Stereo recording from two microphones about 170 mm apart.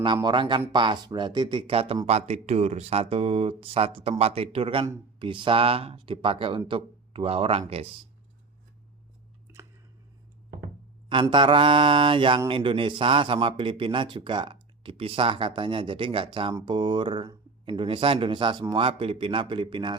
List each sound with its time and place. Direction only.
0.0 s speech: 25° right (ahead or behind)
11.1 s speech: 30° right (ahead or behind)